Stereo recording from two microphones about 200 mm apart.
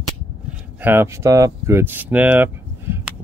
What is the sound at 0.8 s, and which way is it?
Speech, 10° right (ahead or behind).